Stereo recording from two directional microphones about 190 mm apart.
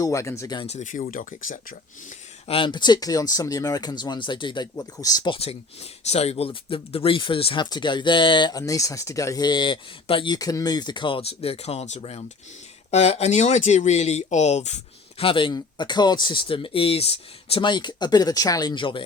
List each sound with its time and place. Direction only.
0.0 s speech: 15° left (ahead or behind)
0.7 s speech: 40° left (ahead or behind)
2.5 s speech: 25° left (ahead or behind)